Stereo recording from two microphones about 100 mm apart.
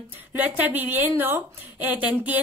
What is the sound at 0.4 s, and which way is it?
A woman's voice, 15° right (ahead or behind).